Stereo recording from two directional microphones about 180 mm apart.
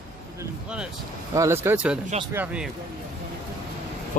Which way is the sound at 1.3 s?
15° right (ahead or behind).